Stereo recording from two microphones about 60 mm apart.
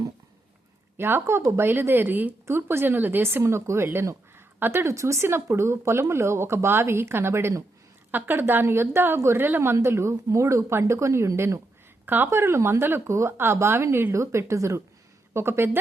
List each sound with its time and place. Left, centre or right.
0.9 s speech: right
2.5 s speech: right
8.6 s speech: right
12.0 s speech: right
12.8 s speech: right
15.3 s speech: right